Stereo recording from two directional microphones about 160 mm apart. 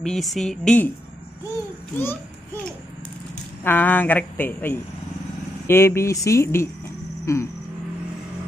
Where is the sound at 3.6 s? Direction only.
10° left (ahead or behind).